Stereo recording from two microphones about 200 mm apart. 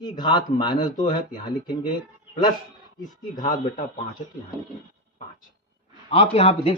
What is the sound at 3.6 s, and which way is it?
Speech, 35° left (ahead or behind).